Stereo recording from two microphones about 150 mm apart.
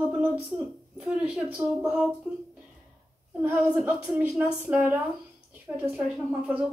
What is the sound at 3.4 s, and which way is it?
A woman's voice, 10° right (ahead or behind).